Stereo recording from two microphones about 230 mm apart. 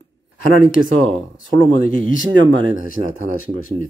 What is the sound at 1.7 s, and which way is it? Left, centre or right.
Speech, right.